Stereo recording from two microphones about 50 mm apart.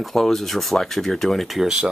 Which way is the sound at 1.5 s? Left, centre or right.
Centre.